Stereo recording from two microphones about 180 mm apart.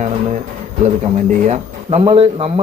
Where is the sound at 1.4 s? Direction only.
35° right (ahead or behind).